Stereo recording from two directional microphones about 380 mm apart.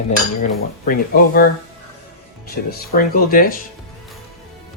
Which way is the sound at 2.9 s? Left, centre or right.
Left.